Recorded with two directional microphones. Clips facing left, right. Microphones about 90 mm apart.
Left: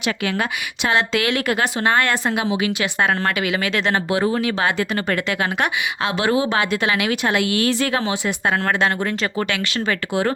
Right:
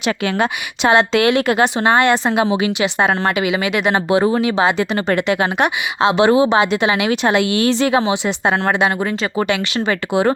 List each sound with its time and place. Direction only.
0.3 s speech: 25° right (ahead or behind)